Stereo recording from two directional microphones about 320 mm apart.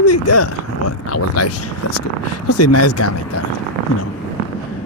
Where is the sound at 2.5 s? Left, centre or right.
Left.